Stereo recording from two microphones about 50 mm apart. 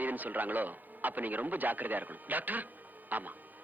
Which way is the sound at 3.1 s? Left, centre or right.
Right.